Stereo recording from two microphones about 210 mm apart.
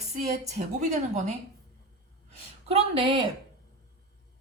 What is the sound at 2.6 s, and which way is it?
Speech, 25° right (ahead or behind).